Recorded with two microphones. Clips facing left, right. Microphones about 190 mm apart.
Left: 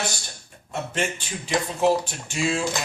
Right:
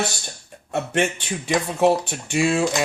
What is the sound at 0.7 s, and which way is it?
Speech, 65° right (ahead or behind).